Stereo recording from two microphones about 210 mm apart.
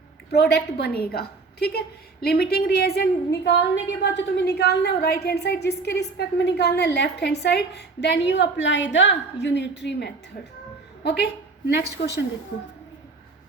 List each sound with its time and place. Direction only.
0.3 s a woman's voice: 50° left (ahead or behind)